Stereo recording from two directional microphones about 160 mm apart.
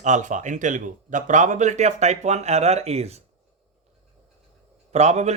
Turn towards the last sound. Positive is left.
turn(degrees=-45)  # may be behind; listen again after turning